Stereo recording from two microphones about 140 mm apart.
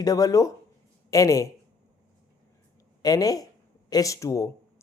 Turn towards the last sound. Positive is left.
turn(degrees=25)  # may be behind; listen again after turning